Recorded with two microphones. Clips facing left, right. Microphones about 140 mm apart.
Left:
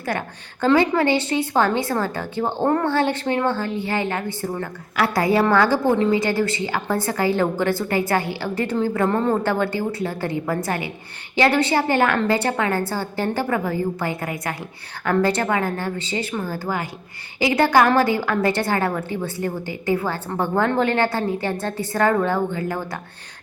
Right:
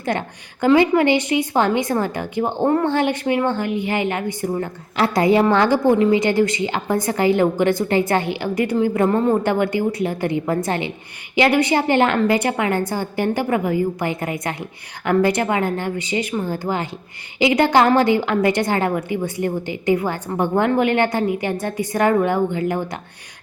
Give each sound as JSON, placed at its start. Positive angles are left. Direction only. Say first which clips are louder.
{"t": 0.0, "sound": "a woman's voice", "louder": "right 3 dB", "side_deg": -20}